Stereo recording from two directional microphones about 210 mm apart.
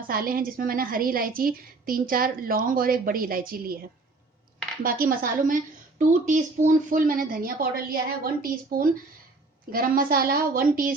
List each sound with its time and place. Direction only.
0.1 s a woman's voice: 45° right (ahead or behind)
4.8 s a woman's voice: 45° right (ahead or behind)